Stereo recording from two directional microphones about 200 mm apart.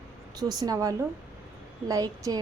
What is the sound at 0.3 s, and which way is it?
A woman's voice, 20° right (ahead or behind).